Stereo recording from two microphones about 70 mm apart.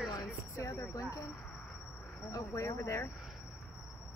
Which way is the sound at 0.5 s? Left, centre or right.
Left.